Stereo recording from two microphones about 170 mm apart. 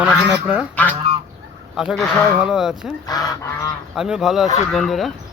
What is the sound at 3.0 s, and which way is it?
Goose, 20° left (ahead or behind).